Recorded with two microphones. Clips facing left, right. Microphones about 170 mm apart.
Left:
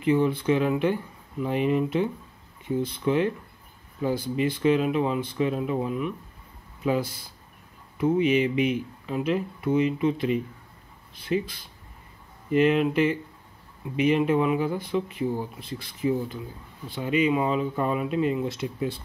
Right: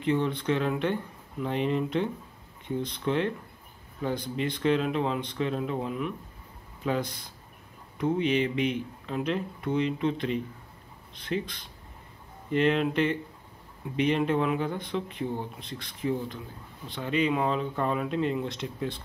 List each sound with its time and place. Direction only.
0.0 s speech: 5° left (ahead or behind)